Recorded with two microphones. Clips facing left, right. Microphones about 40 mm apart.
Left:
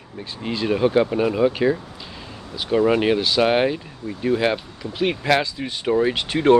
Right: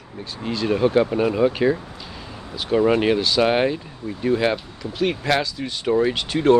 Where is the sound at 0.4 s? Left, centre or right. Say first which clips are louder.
Even; left.